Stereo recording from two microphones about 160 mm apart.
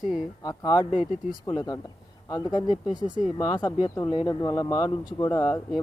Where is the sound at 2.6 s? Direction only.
50° left (ahead or behind).